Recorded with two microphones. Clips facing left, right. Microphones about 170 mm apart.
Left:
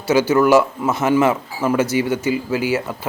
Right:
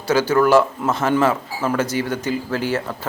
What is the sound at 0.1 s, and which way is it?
Speech, 10° left (ahead or behind).